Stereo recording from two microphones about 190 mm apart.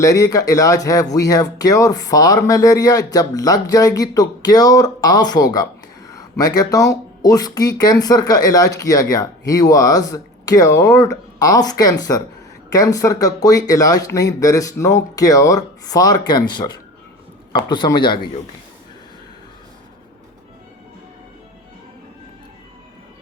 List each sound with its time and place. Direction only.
0.0 s speech: 20° left (ahead or behind)